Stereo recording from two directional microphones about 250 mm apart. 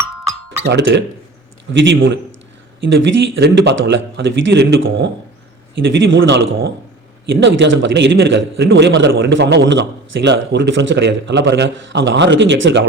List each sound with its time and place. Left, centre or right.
0.6 s a man's voice: right